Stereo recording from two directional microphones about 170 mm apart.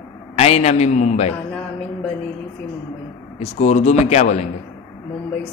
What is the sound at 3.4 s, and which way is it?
A man's voice, 40° left (ahead or behind).